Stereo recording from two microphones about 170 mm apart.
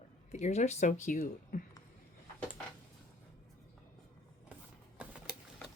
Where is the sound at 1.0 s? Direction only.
55° left (ahead or behind).